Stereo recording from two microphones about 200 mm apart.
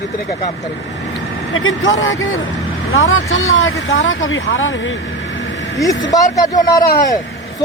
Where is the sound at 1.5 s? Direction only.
75° left (ahead or behind).